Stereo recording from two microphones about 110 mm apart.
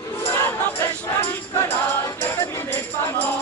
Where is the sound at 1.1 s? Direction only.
20° left (ahead or behind).